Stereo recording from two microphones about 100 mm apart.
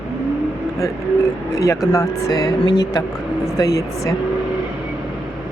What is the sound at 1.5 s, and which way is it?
Speech, 30° left (ahead or behind).